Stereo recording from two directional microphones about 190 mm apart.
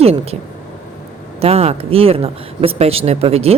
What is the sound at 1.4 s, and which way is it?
Speech, 30° right (ahead or behind).